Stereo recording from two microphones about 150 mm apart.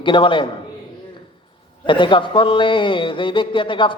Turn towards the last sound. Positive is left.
turn(degrees=35)  # may be behind; listen again after turning